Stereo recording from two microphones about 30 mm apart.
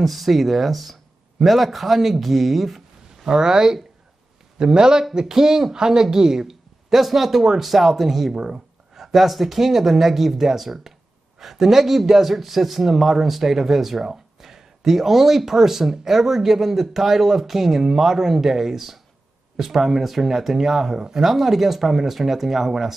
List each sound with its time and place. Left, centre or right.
0.0 s speech: centre
3.3 s a woman's voice: right